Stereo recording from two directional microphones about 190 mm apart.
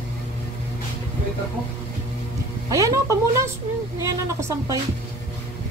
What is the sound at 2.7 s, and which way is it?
Speech, 15° right (ahead or behind).